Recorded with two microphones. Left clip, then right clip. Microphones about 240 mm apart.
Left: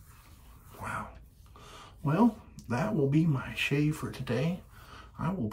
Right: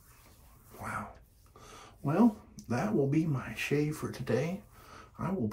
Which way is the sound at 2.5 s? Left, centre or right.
Left.